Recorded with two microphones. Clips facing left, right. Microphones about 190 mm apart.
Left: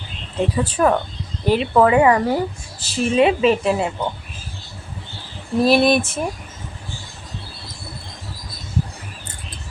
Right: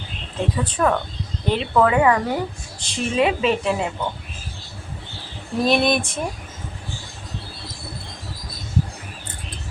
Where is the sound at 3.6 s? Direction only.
35° left (ahead or behind).